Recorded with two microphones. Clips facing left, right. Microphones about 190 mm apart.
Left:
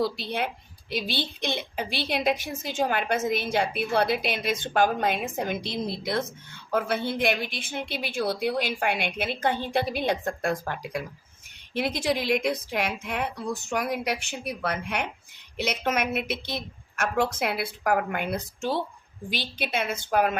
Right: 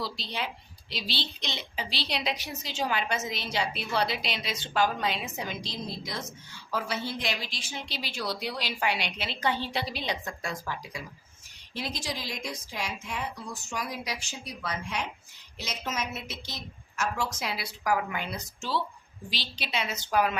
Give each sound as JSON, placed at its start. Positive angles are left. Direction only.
{"t": 0.0, "sound": "a woman's voice", "side_deg": 55}